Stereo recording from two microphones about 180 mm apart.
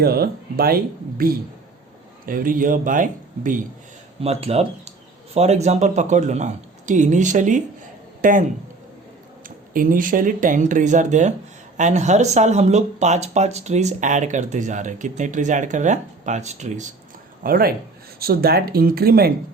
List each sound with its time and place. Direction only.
0.0 s speech: 60° right (ahead or behind)
4.2 s speech: 35° right (ahead or behind)
17.4 s speech: 55° right (ahead or behind)